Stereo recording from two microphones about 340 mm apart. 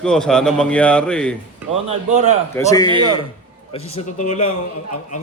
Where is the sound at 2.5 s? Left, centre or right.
Centre.